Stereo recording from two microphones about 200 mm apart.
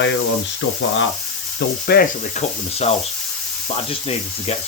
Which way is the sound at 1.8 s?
50° left (ahead or behind).